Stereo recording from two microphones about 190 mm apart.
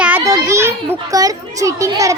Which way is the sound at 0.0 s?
10° right (ahead or behind).